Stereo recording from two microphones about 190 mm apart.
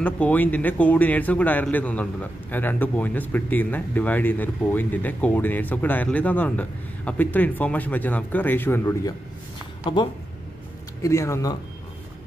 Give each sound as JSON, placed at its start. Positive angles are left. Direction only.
{"t": 0.0, "sound": "speech", "side_deg": 10}
{"t": 10.0, "sound": "speech", "side_deg": 25}